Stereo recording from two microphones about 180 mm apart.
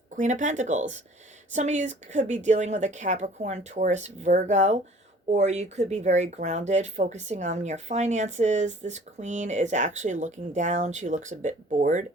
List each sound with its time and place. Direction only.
0.2 s speech: 45° right (ahead or behind)